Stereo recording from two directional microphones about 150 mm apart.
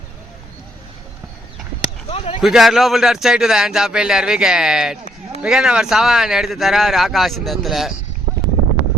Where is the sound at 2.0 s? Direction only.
40° left (ahead or behind).